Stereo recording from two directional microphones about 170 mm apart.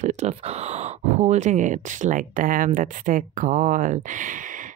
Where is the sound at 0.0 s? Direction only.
40° right (ahead or behind).